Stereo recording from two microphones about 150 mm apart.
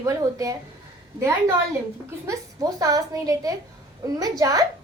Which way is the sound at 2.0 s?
20° right (ahead or behind).